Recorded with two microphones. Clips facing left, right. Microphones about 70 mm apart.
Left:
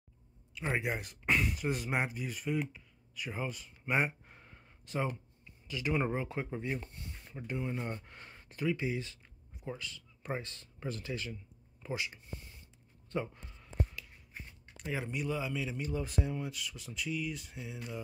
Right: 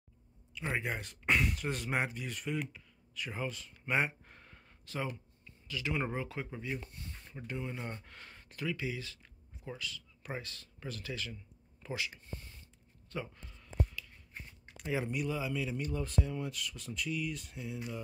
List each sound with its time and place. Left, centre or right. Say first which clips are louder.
0.6 s speech: left 2 dB; centre
4.8 s speech: left 3 dB; left
13.1 s speech: left 5 dB; left
13.4 s a sound: right 1 dB; centre
14.8 s speech: right 2 dB; centre